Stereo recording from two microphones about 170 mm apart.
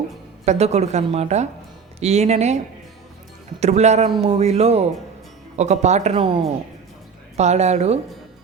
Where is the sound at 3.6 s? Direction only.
40° right (ahead or behind).